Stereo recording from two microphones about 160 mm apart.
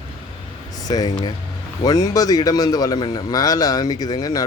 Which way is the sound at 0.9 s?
25° left (ahead or behind).